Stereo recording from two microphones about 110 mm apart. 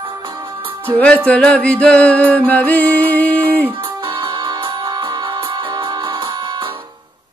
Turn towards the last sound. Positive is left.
turn(degrees=-40)  # may be behind; listen again after turning